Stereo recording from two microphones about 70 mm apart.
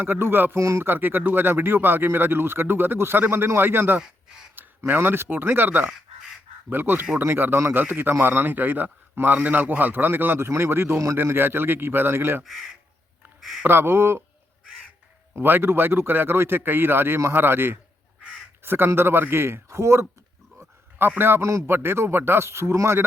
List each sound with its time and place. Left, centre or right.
0.0 s a man's voice: right
0.6 s speech: right
0.9 s a man's voice: right
12.4 s speech: centre
13.7 s a man's voice: right
15.4 s a man's voice: right
21.2 s a man's voice: right